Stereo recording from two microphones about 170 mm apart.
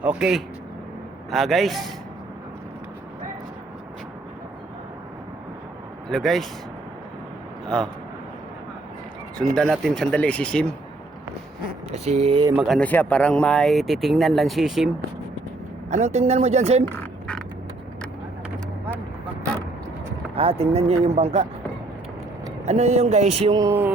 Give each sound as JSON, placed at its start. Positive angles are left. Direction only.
{"t": 0.0, "sound": "speech", "side_deg": -5}
{"t": 6.1, "sound": "speech", "side_deg": 0}
{"t": 9.4, "sound": "speech", "side_deg": 0}
{"t": 11.9, "sound": "speech", "side_deg": -40}
{"t": 12.6, "sound": "speech", "side_deg": 5}
{"t": 15.9, "sound": "speech", "side_deg": -40}
{"t": 16.8, "sound": "a sound", "side_deg": 10}
{"t": 20.3, "sound": "speech", "side_deg": -35}
{"t": 22.6, "sound": "speech", "side_deg": -40}
{"t": 23.6, "sound": "speech", "side_deg": -15}